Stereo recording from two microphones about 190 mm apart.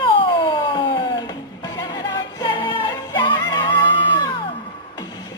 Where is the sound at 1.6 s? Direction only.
20° left (ahead or behind).